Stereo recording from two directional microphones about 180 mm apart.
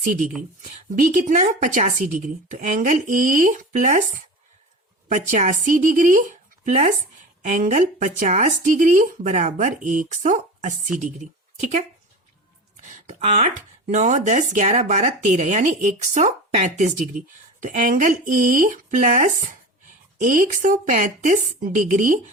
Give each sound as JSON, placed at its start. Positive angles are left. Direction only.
{"t": 0.0, "sound": "speech", "side_deg": -45}
{"t": 12.8, "sound": "speech", "side_deg": -40}